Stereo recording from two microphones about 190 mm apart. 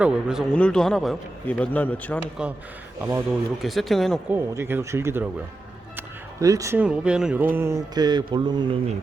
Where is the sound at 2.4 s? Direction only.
5° right (ahead or behind).